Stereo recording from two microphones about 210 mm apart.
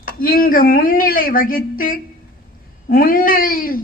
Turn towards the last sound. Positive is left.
turn(degrees=40)  # may be behind; listen again after turning